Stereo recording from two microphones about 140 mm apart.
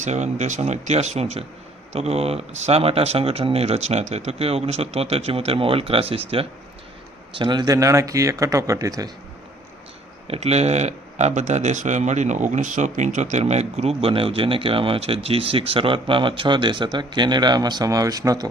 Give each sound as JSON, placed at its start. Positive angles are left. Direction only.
{"t": 0.0, "sound": "speech", "side_deg": -55}
{"t": 10.2, "sound": "speech", "side_deg": -50}